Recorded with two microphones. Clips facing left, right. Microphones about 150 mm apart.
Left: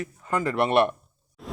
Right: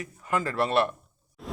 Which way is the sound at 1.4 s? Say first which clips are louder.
Even; centre (ahead or behind).